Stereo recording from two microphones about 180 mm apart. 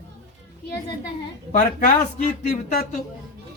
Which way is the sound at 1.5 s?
45° left (ahead or behind).